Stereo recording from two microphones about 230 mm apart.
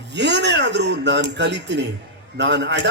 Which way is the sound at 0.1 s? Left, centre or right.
Right.